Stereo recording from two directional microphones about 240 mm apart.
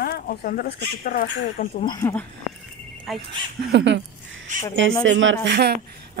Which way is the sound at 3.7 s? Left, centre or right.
Right.